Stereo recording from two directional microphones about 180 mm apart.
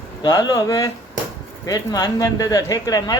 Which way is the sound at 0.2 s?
20° left (ahead or behind).